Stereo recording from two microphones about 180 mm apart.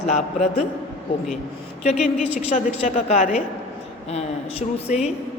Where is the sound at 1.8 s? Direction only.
40° left (ahead or behind).